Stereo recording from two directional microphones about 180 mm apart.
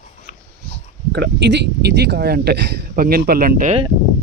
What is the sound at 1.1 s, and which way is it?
Speech, 70° right (ahead or behind).